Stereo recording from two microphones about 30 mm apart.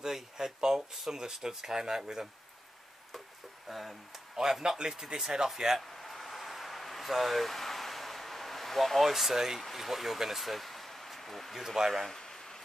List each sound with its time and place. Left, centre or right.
0.0 s speech: centre
0.7 s a sound: centre
1.4 s speech: centre
3.6 s speech: centre
4.4 s speech: centre
5.8 s a sound: centre
9.1 s speech: centre
11.5 s speech: centre